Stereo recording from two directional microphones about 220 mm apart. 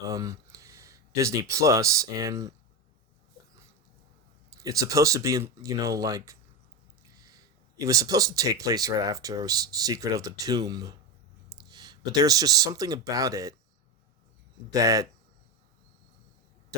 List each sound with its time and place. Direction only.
0.0 s speech: 15° right (ahead or behind)
4.6 s speech: 15° right (ahead or behind)
7.3 s speech: 15° right (ahead or behind)
14.7 s speech: 15° right (ahead or behind)